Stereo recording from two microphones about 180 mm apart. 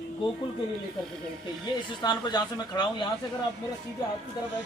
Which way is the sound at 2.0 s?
25° left (ahead or behind).